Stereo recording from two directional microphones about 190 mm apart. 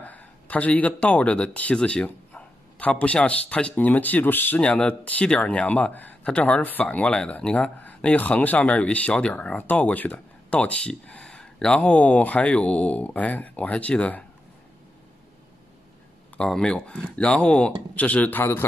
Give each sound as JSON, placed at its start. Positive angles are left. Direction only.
{"t": 0.0, "sound": "speech", "side_deg": 10}
{"t": 16.3, "sound": "speech", "side_deg": 5}